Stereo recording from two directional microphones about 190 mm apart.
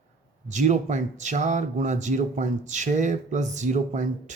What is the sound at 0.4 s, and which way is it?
Speech, 35° right (ahead or behind).